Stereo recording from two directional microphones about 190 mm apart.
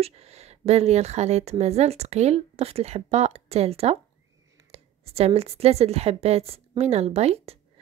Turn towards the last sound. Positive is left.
turn(degrees=-35)  # may be behind; listen again after turning